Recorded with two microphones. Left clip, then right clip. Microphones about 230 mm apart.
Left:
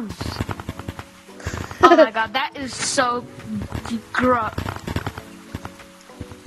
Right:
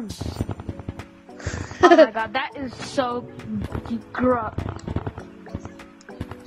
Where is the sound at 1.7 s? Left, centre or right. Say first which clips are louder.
Left 1 dB; centre.